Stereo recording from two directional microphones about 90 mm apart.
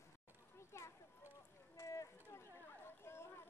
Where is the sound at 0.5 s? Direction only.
30° left (ahead or behind).